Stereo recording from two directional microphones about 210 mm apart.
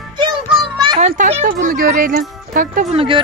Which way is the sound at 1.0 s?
35° right (ahead or behind).